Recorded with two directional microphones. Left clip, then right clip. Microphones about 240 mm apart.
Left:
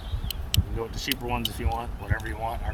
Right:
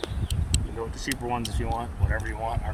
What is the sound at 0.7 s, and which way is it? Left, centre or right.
Speech, centre.